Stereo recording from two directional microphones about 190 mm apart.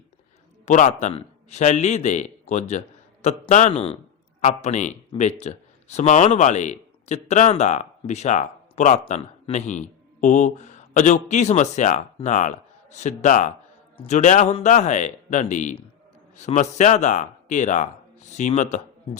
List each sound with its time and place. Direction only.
0.6 s a man's voice: 40° left (ahead or behind)